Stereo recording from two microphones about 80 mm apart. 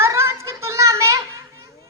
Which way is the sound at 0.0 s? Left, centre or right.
Right.